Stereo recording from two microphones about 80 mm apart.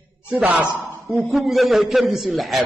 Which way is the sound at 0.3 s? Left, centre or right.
Centre.